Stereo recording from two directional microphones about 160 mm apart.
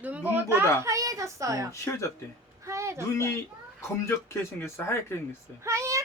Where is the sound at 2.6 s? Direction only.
20° right (ahead or behind).